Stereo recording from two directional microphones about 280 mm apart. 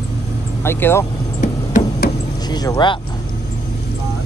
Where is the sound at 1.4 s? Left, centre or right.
Left.